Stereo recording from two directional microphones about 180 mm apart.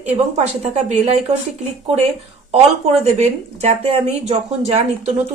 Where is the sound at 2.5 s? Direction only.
35° right (ahead or behind).